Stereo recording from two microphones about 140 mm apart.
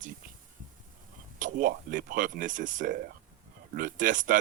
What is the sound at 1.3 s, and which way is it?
Speech, 75° right (ahead or behind).